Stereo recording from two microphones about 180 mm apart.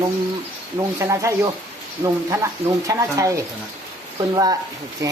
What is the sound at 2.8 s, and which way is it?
Speech, 15° right (ahead or behind).